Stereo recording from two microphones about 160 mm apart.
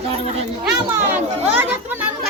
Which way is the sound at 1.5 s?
10° right (ahead or behind).